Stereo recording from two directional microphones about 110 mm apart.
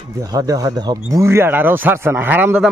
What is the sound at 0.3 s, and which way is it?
Speech, 35° right (ahead or behind).